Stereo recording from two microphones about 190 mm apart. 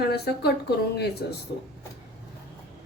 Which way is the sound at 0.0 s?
55° left (ahead or behind).